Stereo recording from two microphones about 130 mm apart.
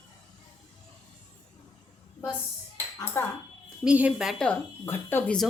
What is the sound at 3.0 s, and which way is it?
Speech, 20° left (ahead or behind).